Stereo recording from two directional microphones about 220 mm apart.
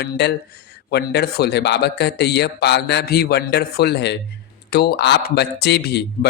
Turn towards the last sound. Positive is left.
turn(degrees=50)  # may be behind; listen again after turning